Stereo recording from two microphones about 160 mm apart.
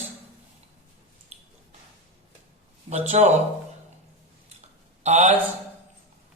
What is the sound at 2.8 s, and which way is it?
Speech, 40° right (ahead or behind).